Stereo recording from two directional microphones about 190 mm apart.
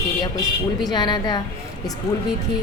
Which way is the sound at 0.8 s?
20° left (ahead or behind).